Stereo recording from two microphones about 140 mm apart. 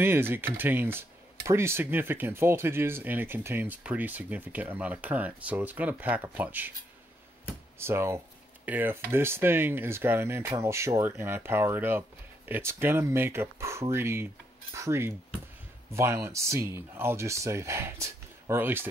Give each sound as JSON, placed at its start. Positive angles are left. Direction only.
{"t": 0.0, "sound": "speech", "side_deg": -15}
{"t": 7.8, "sound": "speech", "side_deg": -20}